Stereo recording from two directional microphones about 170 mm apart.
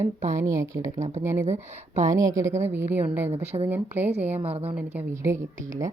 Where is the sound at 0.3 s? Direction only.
15° right (ahead or behind).